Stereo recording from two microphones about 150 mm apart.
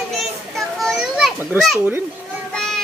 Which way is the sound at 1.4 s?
5° right (ahead or behind).